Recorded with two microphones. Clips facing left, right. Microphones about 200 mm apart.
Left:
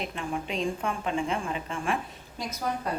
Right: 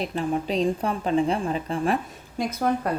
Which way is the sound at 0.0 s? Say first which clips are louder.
Right 7 dB; 35° right (ahead or behind).